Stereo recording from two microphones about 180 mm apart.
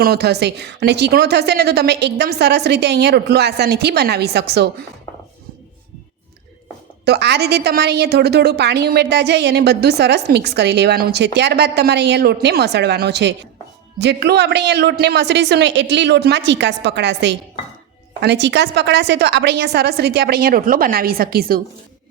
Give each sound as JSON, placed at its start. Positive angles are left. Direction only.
{"t": 0.0, "sound": "a woman's voice", "side_deg": -65}
{"t": 7.0, "sound": "a woman's voice", "side_deg": -70}